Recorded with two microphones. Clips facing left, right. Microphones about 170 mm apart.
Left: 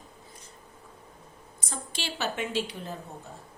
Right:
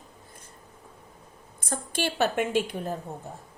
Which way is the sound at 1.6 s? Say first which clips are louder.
Right 8 dB; 55° right (ahead or behind).